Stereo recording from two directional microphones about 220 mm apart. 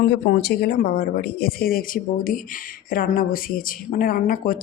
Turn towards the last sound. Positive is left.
turn(degrees=40)  # may be behind; listen again after turning